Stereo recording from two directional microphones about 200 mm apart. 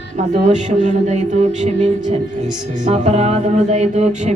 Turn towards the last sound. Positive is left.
turn(degrees=-35)  # may be behind; listen again after turning